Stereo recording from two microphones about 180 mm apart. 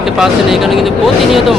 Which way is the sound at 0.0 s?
Centre (ahead or behind).